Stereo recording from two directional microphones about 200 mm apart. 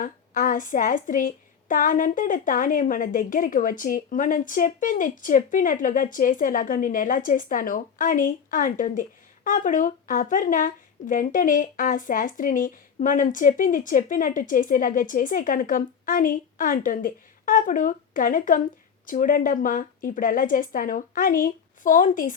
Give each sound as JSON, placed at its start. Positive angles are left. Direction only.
{"t": 0.0, "sound": "a woman's voice", "side_deg": 45}